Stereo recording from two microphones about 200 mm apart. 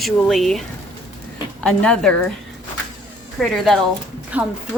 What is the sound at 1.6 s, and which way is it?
Speech, 5° left (ahead or behind).